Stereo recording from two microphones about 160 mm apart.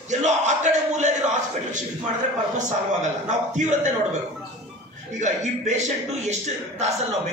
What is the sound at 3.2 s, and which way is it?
Speech, 50° right (ahead or behind).